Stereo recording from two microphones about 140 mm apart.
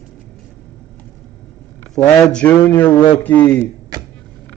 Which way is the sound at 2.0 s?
5° left (ahead or behind).